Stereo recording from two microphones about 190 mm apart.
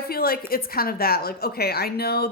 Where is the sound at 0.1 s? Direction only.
50° left (ahead or behind).